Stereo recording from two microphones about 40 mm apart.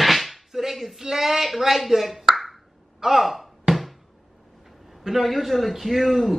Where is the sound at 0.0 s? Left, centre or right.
Centre.